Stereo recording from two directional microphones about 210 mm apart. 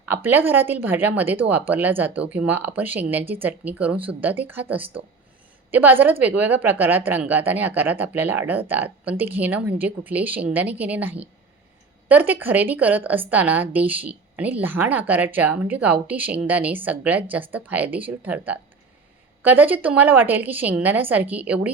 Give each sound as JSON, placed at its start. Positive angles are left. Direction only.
{"t": 0.1, "sound": "a woman's voice", "side_deg": -10}